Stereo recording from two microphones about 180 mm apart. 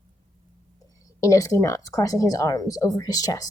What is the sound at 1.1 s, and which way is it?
Speech, 15° left (ahead or behind).